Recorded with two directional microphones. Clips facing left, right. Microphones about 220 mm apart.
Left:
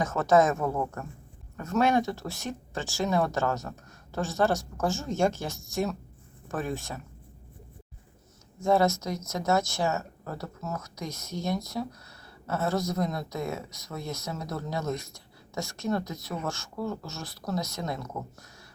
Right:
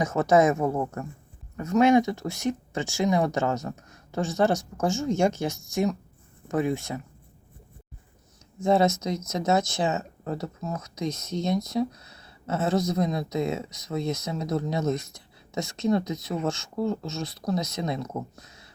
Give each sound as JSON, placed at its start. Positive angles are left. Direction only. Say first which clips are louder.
{"t": 0.0, "sound": "speech", "louder": "right 2 dB", "side_deg": -15}
{"t": 8.5, "sound": "speech", "louder": "right 2 dB", "side_deg": -20}